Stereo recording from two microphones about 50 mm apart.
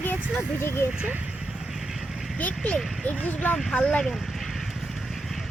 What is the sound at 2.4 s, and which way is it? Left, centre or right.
Speech, left.